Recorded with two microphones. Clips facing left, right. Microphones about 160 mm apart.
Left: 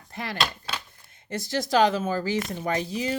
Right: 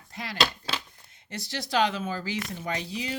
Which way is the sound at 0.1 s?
55° left (ahead or behind).